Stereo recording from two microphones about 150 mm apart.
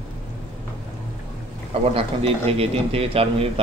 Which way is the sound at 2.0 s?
40° right (ahead or behind).